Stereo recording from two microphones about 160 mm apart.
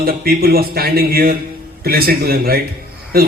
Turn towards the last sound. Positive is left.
turn(degrees=-70)  # may be behind; listen again after turning